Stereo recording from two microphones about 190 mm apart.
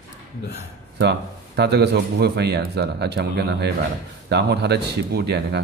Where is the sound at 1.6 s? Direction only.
60° right (ahead or behind).